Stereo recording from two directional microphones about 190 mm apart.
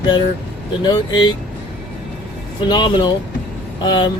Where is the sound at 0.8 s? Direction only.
25° left (ahead or behind).